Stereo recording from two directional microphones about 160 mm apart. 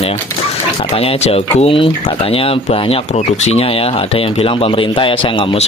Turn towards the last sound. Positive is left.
turn(degrees=35)  # may be behind; listen again after turning